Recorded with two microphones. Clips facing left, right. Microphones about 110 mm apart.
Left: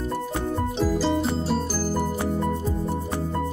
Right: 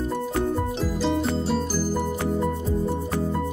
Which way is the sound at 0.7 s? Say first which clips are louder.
Left 2 dB; centre (ahead or behind).